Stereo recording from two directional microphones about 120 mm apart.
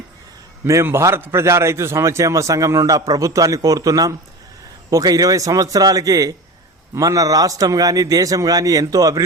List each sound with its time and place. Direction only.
0.6 s a man's voice: 20° right (ahead or behind)